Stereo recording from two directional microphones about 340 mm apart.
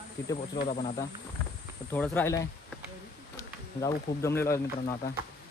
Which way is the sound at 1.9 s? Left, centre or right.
Centre.